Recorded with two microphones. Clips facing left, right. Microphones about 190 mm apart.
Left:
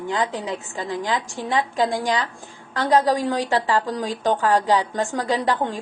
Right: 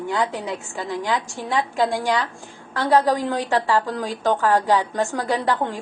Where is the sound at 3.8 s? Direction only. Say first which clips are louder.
Even; 15° left (ahead or behind).